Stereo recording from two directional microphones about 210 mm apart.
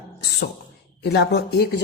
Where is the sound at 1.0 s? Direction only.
55° left (ahead or behind).